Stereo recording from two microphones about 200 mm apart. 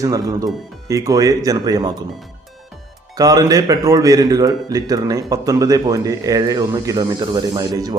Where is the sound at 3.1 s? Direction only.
20° right (ahead or behind).